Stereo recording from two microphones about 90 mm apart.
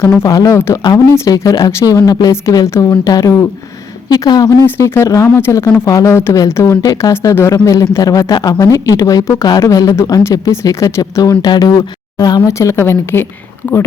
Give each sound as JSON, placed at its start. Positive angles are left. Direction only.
{"t": 0.0, "sound": "a woman's voice", "side_deg": 20}
{"t": 0.3, "sound": "speech", "side_deg": 35}
{"t": 4.6, "sound": "speech", "side_deg": 30}
{"t": 8.3, "sound": "speech", "side_deg": 55}
{"t": 8.6, "sound": "speech", "side_deg": 40}
{"t": 11.4, "sound": "speech", "side_deg": 50}
{"t": 12.5, "sound": "a woman's voice", "side_deg": 30}